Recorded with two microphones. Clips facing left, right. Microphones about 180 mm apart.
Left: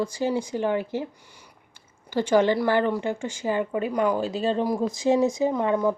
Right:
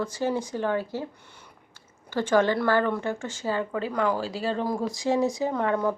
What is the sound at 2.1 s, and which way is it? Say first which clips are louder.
Speech: left 2 dB; 15° left (ahead or behind).